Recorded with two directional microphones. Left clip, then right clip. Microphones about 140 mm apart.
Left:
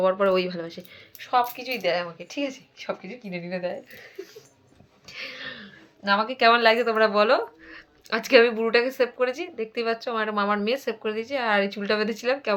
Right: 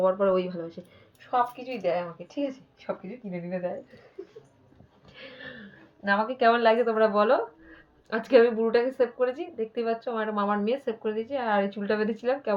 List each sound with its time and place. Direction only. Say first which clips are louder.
0.0 s speech: left 2 dB; 20° left (ahead or behind)
5.1 s a sound: left 7 dB; 30° left (ahead or behind)
8.9 s speech: left 2 dB; 30° left (ahead or behind)